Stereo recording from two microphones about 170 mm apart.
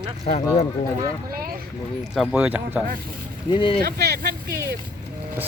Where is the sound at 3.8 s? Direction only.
65° right (ahead or behind).